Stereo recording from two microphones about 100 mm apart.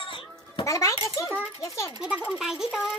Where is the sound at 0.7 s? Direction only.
30° left (ahead or behind).